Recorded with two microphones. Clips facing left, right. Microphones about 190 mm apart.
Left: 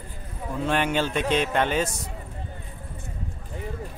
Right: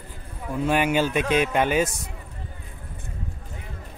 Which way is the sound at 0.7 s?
10° right (ahead or behind).